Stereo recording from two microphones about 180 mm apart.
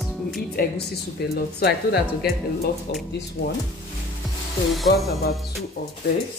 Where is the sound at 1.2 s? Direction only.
65° left (ahead or behind).